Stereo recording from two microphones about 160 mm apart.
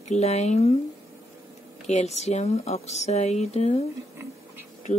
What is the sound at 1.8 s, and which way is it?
Speech, 45° left (ahead or behind).